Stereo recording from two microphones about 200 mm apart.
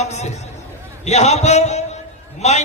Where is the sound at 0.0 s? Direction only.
35° left (ahead or behind).